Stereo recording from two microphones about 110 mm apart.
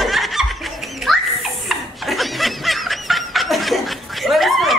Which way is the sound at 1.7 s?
Centre (ahead or behind).